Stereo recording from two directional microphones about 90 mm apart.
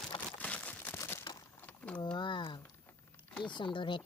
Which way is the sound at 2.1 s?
60° left (ahead or behind).